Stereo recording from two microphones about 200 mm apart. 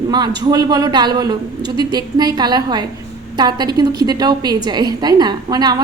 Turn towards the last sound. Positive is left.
turn(degrees=-20)  # may be behind; listen again after turning